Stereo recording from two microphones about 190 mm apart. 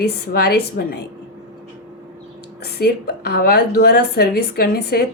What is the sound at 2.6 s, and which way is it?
A woman's voice, 55° left (ahead or behind).